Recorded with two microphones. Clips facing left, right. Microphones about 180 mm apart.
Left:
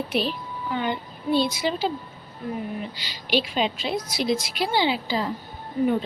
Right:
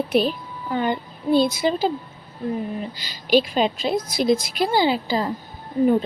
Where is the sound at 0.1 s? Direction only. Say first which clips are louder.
Right 6 dB; 45° right (ahead or behind).